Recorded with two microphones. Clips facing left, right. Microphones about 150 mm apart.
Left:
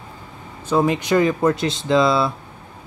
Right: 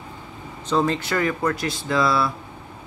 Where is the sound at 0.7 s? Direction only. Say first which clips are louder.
Left 4 dB; 15° left (ahead or behind).